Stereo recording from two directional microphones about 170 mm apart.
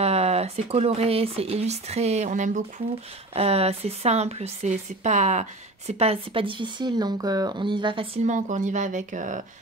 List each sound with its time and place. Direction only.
0.0 s speech: 40° right (ahead or behind)